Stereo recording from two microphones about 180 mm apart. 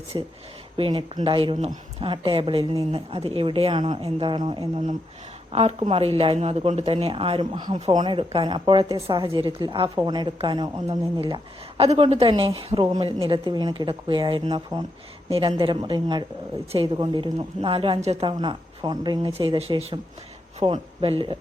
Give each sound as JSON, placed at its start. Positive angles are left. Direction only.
{"t": 0.8, "sound": "speech", "side_deg": -25}